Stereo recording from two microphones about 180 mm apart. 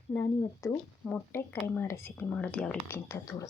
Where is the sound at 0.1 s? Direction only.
15° left (ahead or behind).